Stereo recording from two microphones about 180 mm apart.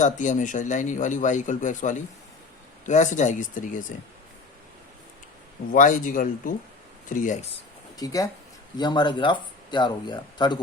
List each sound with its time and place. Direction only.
0.0 s a man's voice: 45° left (ahead or behind)
5.7 s a man's voice: 45° left (ahead or behind)
7.9 s speech: 20° left (ahead or behind)